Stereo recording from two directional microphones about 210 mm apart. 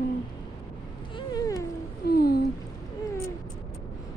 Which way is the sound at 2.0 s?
50° left (ahead or behind).